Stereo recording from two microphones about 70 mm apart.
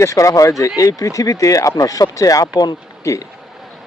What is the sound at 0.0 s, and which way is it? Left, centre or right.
Speech, left.